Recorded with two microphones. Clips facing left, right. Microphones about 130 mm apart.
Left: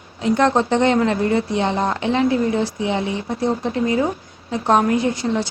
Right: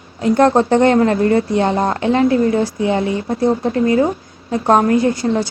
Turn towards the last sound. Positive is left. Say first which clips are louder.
# right 4 dB
turn(degrees=-45)  # may be behind; listen again after turning